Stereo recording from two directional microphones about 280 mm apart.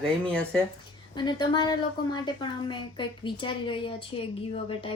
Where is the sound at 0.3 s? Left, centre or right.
Centre.